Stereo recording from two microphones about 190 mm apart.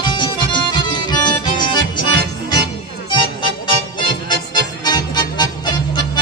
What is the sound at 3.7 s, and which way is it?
Music, 25° left (ahead or behind).